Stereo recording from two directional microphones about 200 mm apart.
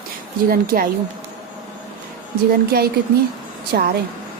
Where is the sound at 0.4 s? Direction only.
45° right (ahead or behind).